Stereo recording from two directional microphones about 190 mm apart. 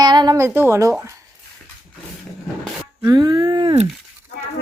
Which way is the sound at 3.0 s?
20° right (ahead or behind).